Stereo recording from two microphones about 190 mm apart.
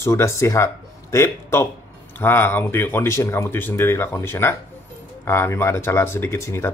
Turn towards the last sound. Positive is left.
turn(degrees=15)  # may be behind; listen again after turning